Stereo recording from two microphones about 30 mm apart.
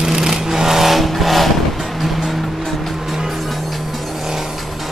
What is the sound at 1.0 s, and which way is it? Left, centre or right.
Vehicle, centre.